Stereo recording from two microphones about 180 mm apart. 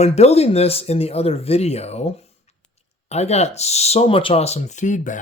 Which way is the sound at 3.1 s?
35° left (ahead or behind).